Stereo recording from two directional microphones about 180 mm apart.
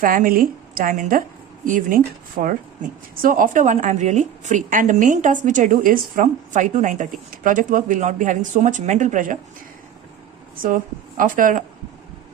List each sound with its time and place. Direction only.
0.0 s a woman's voice: 50° right (ahead or behind)
11.2 s a woman's voice: 50° right (ahead or behind)